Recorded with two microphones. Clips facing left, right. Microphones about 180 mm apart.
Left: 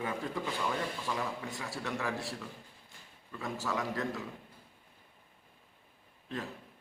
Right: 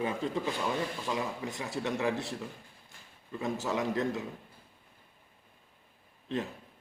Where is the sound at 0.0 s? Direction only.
20° right (ahead or behind).